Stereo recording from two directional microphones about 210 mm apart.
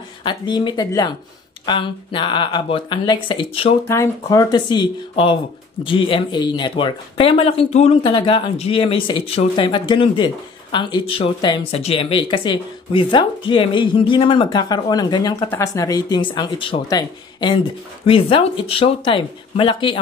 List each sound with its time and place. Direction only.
0.2 s speech: 20° left (ahead or behind)
3.8 s speech: 15° left (ahead or behind)